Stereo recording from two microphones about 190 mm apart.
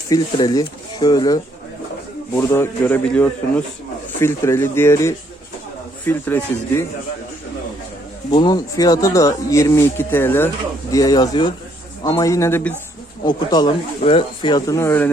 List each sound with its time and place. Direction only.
0.1 s speech: 20° left (ahead or behind)
8.3 s speech: 20° left (ahead or behind)
13.2 s speech: 20° left (ahead or behind)